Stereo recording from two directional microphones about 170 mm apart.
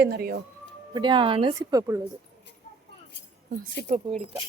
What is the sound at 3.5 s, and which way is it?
Speech, 55° right (ahead or behind).